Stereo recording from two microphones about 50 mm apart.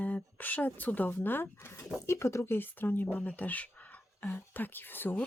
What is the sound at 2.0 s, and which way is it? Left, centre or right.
Speech, left.